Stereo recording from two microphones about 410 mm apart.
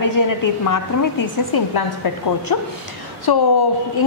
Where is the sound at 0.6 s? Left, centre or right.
Left.